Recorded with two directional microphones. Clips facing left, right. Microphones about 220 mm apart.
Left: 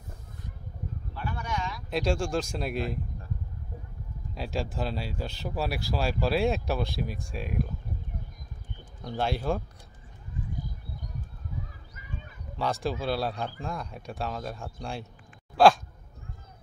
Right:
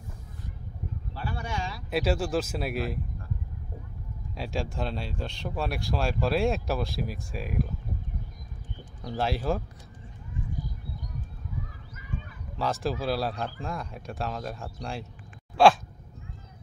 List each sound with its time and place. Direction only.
1.1 s a sound: 30° right (ahead or behind)
1.9 s speech: 5° right (ahead or behind)
4.4 s speech: centre (ahead or behind)
9.0 s speech: centre (ahead or behind)
12.5 s speech: centre (ahead or behind)
15.5 s a sound: centre (ahead or behind)